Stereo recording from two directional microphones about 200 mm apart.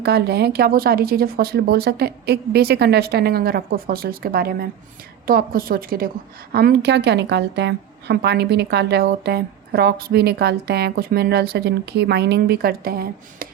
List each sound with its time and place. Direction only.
0.0 s a woman's voice: 55° right (ahead or behind)